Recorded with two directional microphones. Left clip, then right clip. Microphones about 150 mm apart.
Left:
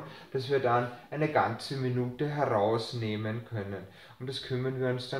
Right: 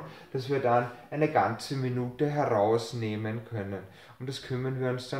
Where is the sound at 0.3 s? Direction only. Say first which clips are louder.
Right 1 dB; 30° right (ahead or behind).